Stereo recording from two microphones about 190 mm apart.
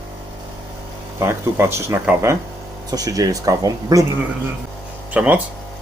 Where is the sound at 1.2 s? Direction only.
15° right (ahead or behind).